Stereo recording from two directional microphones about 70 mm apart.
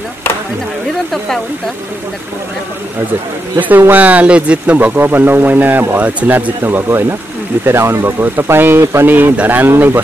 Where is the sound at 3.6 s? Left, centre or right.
Right.